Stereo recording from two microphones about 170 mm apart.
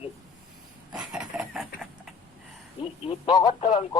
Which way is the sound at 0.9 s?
5° right (ahead or behind).